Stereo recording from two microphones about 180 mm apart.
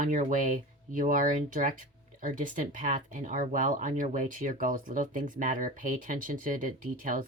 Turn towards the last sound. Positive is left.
turn(degrees=-45)  # may be behind; listen again after turning